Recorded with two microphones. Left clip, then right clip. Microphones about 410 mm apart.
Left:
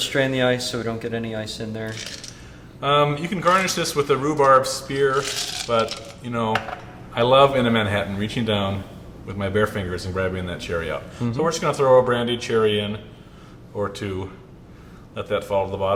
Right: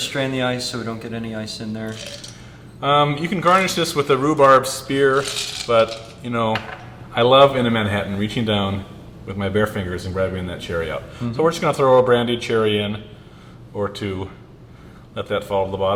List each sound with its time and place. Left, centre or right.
0.1 s speech: left
2.8 s a man's voice: centre